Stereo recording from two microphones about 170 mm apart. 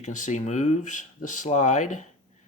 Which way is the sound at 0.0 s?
45° left (ahead or behind).